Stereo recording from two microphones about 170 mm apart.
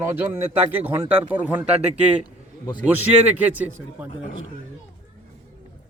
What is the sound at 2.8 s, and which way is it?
A man's voice, 10° right (ahead or behind).